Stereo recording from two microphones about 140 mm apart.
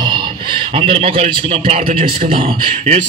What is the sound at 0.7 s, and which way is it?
A man's voice, 40° right (ahead or behind).